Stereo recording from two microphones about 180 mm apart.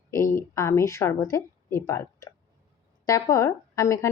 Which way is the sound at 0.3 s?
15° left (ahead or behind).